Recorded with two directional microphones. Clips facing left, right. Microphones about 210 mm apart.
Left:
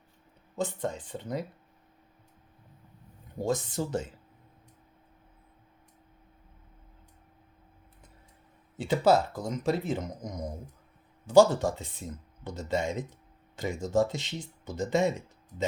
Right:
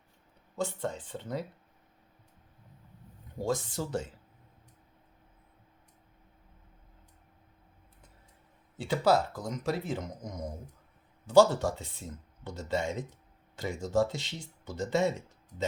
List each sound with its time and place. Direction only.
0.5 s speech: 15° left (ahead or behind)
3.3 s speech: 20° left (ahead or behind)
8.8 s speech: 25° left (ahead or behind)